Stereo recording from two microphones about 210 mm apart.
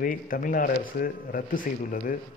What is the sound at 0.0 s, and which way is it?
A man's voice, 40° left (ahead or behind).